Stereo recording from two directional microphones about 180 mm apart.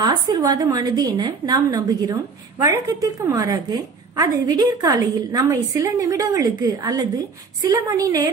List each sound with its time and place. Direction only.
0.0 s a woman's voice: 20° right (ahead or behind)